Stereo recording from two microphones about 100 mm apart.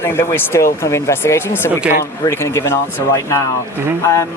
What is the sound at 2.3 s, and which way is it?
Speech, 25° left (ahead or behind).